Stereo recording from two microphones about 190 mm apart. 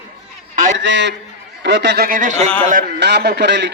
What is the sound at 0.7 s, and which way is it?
A man's voice, 70° right (ahead or behind).